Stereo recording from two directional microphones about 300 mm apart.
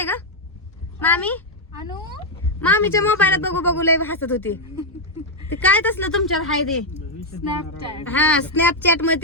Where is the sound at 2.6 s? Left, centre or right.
Centre.